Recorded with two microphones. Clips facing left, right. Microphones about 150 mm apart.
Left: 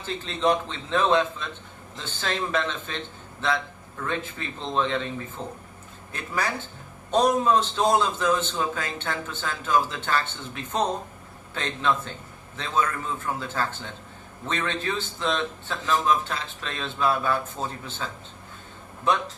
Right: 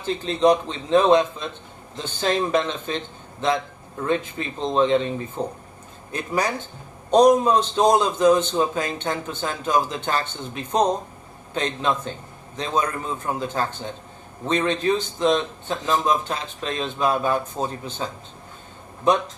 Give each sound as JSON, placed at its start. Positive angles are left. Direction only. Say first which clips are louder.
{"t": 0.0, "sound": "a man's voice", "louder": "right 6 dB", "side_deg": -15}